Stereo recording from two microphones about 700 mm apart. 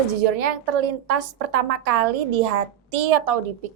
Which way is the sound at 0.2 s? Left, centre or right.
Right.